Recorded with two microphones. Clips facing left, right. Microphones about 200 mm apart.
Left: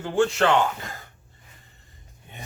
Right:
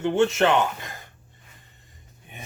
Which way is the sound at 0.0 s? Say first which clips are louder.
Right 1 dB; 20° right (ahead or behind).